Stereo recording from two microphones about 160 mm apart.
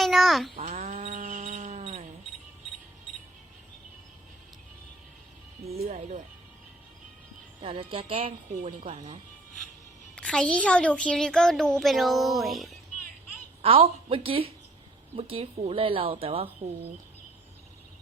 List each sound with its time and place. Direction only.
0.0 s a sound: centre (ahead or behind)
0.6 s a sound: 50° right (ahead or behind)
5.9 s speech: 50° right (ahead or behind)
7.6 s speech: 30° right (ahead or behind)
10.2 s a child's voice: 5° left (ahead or behind)
13.6 s a woman's voice: 35° right (ahead or behind)